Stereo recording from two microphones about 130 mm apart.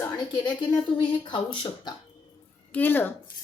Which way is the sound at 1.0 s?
40° left (ahead or behind).